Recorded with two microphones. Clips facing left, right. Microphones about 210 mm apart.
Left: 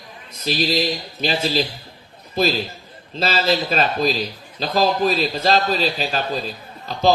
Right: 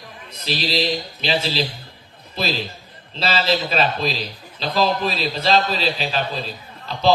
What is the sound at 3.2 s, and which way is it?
A man's voice, 45° left (ahead or behind).